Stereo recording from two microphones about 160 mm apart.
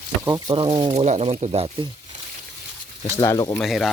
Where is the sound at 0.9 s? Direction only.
45° right (ahead or behind).